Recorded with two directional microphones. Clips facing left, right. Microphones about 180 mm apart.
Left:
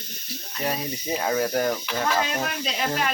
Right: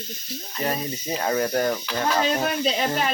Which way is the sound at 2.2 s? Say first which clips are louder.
Right 4 dB; 30° right (ahead or behind).